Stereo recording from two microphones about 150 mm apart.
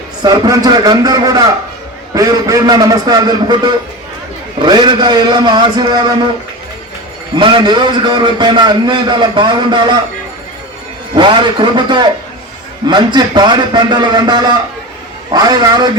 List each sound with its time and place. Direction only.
0.2 s a man's voice: 25° right (ahead or behind)
7.3 s a man's voice: 30° right (ahead or behind)
11.1 s a man's voice: 30° right (ahead or behind)